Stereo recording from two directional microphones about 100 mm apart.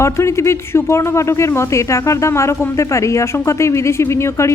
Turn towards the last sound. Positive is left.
turn(degrees=30)  # may be behind; listen again after turning